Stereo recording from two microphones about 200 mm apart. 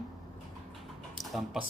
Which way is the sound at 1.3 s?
Centre (ahead or behind).